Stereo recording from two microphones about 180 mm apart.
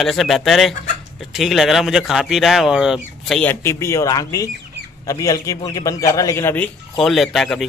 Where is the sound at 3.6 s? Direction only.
15° left (ahead or behind).